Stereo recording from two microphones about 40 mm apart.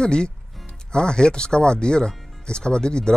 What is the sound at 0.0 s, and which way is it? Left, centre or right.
Speech, left.